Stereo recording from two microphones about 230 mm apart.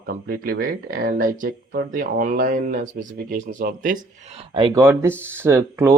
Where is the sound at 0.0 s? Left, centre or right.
Right.